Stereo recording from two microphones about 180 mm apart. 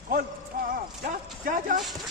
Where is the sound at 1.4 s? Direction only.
50° right (ahead or behind).